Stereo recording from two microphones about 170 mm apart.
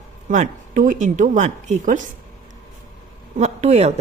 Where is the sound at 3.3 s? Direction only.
40° right (ahead or behind).